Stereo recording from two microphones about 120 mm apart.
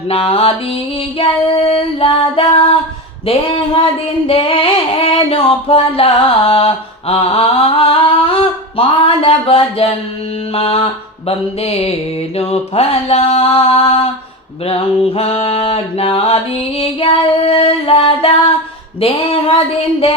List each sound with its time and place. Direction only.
0.1 s mantra: 55° left (ahead or behind)